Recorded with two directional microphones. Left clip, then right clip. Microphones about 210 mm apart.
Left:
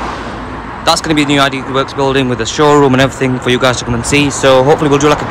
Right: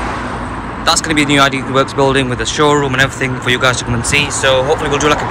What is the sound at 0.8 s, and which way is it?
Speech, 20° left (ahead or behind).